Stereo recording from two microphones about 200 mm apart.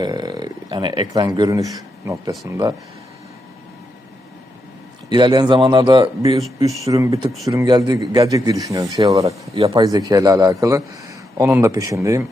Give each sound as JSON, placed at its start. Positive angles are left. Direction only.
{"t": 0.0, "sound": "speech", "side_deg": -20}
{"t": 5.0, "sound": "speech", "side_deg": -20}